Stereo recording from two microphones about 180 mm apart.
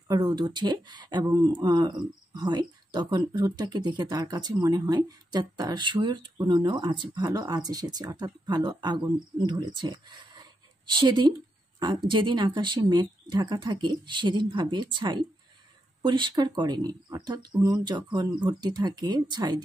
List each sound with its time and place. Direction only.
0.1 s speech: 25° right (ahead or behind)